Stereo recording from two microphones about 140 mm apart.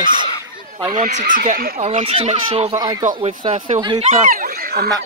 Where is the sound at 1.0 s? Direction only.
65° right (ahead or behind); by 1.8 s 90° right.